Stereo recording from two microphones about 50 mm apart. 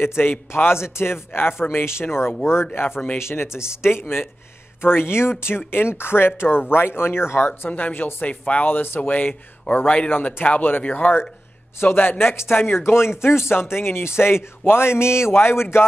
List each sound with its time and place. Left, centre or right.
0.0 s speech: left
3.2 s speech: left
7.8 s speech: left